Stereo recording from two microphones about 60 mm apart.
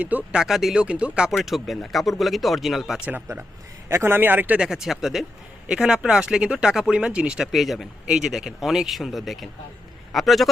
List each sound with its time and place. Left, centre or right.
0.0 s speech: right
0.3 s speech: centre
0.8 s speech: centre
1.3 s speech: centre
3.8 s a man's voice: right
4.5 s speech: centre
7.4 s speech: centre
8.0 s speech: centre
8.3 s a man's voice: centre